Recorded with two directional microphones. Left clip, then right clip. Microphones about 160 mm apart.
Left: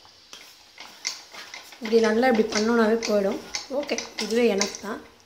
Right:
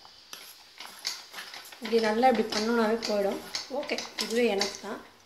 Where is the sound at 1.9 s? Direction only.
20° left (ahead or behind).